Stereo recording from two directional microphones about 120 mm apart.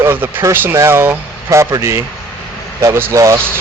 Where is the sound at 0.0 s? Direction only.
20° right (ahead or behind).